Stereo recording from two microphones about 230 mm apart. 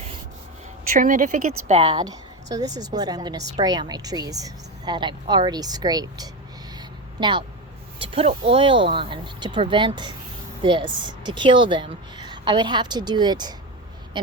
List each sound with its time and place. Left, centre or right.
0.9 s a woman's voice: right; by 6.2 s centre
6.7 s a sound: centre
8.0 s a woman's voice: right